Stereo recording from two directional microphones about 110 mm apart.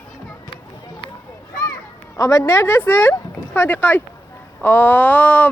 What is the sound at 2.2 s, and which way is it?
Speech, 25° left (ahead or behind).